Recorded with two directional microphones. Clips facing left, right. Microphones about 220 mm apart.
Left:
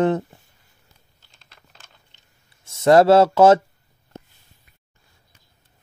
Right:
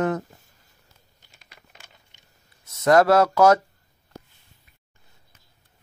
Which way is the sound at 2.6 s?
30° left (ahead or behind).